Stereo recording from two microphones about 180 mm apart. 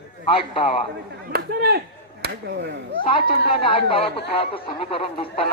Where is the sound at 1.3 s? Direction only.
60° right (ahead or behind).